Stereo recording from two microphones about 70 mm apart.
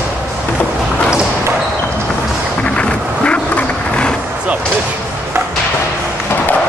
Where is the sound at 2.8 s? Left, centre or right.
Centre.